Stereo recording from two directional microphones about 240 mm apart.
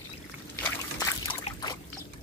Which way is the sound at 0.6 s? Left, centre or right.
Centre.